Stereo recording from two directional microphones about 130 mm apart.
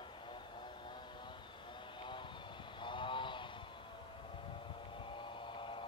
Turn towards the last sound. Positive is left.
turn(degrees=40)  # may be behind; listen again after turning